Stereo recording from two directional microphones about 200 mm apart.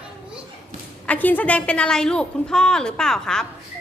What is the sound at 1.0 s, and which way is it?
A woman's voice, 10° left (ahead or behind).